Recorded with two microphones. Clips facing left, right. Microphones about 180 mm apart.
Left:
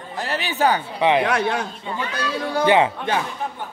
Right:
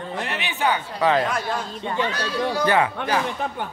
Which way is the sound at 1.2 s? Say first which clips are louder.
Left 5 dB; 75° left (ahead or behind).